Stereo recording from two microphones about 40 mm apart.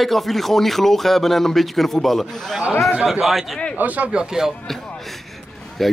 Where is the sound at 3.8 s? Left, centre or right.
Right.